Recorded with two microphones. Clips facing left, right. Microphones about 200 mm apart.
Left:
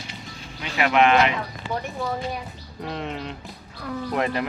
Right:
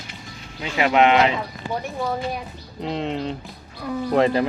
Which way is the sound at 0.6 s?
25° right (ahead or behind).